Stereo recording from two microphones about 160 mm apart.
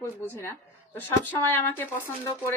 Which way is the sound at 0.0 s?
20° left (ahead or behind).